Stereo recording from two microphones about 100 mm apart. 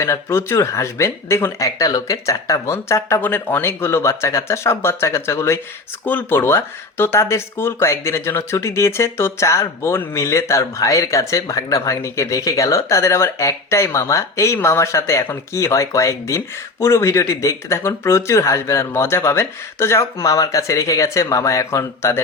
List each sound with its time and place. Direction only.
0.0 s speech: 30° left (ahead or behind)
3.2 s speech: 20° left (ahead or behind)